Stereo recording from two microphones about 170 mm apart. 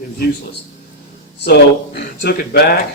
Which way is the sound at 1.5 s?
65° left (ahead or behind).